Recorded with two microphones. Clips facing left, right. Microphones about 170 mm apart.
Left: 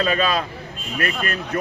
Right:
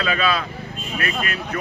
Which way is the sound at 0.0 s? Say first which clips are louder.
Left 2 dB; 40° left (ahead or behind).